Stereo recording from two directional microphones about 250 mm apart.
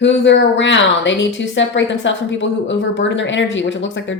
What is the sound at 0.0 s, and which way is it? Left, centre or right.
A woman's voice, left.